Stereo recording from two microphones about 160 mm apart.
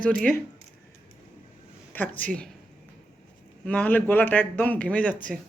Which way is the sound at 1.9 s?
10° left (ahead or behind).